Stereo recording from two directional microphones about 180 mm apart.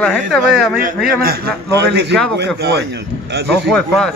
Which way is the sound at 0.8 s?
55° right (ahead or behind).